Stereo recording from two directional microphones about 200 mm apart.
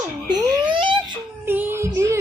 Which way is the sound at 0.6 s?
25° right (ahead or behind).